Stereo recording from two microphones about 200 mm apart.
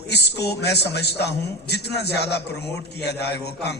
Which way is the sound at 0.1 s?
55° left (ahead or behind).